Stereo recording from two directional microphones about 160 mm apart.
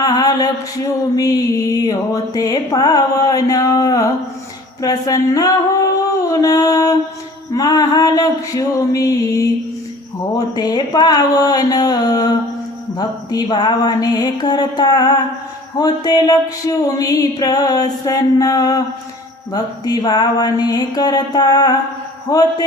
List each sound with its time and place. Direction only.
0.0 s mantra: 25° left (ahead or behind)
1.1 s music: 20° left (ahead or behind)
4.8 s a sound: 25° left (ahead or behind)
7.5 s music: 25° left (ahead or behind)